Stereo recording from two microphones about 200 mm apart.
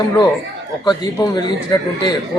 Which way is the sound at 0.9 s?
20° left (ahead or behind).